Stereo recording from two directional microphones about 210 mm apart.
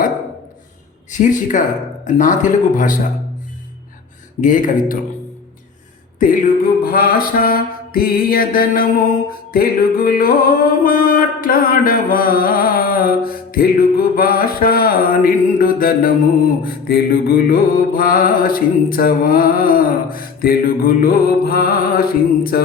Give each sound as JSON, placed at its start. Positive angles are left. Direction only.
{"t": 1.2, "sound": "speech", "side_deg": 35}
{"t": 4.4, "sound": "speech", "side_deg": 40}
{"t": 6.1, "sound": "music", "side_deg": 40}